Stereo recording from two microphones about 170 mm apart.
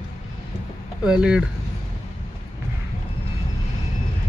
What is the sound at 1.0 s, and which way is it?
Speech, 5° right (ahead or behind).